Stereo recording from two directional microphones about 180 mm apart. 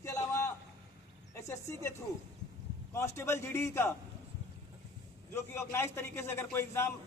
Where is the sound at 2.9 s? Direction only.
15° left (ahead or behind).